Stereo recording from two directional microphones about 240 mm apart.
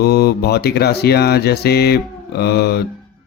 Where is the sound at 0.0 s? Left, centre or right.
Left.